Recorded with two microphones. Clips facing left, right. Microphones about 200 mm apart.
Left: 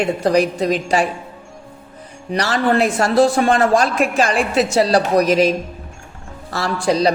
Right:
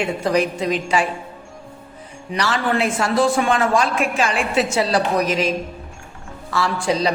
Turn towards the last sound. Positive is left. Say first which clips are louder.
# left 3 dB
turn(degrees=40)  # may be behind; listen again after turning